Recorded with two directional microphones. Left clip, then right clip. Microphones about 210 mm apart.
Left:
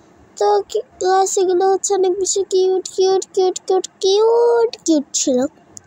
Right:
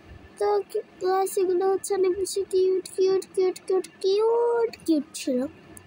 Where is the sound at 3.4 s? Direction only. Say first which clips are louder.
Left 8 dB; 35° left (ahead or behind).